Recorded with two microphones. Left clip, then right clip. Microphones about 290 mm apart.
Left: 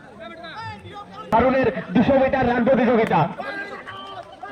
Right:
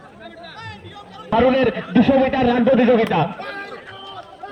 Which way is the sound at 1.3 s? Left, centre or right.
Centre.